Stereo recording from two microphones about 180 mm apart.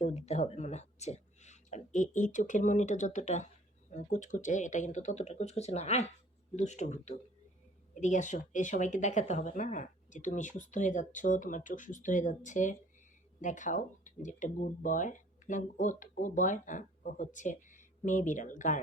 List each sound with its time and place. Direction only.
0.0 s speech: 35° left (ahead or behind)